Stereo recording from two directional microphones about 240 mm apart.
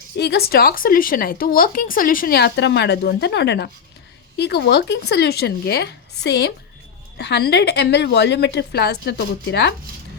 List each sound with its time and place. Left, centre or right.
0.2 s a woman's voice: left